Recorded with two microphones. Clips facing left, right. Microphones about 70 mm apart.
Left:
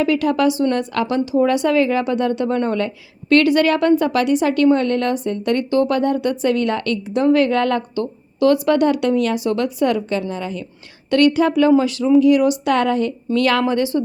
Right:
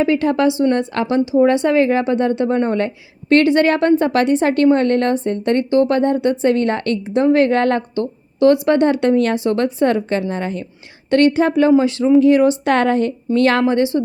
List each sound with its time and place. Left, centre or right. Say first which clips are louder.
0.0 s speech: right 1 dB; right
11.1 s a woman's voice: right 1 dB; right